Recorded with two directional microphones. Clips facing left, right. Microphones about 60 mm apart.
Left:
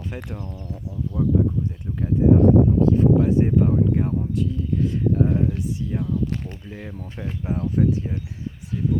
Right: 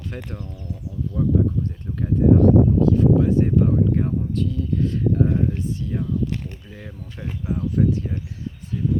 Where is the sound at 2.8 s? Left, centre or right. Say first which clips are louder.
Even; left.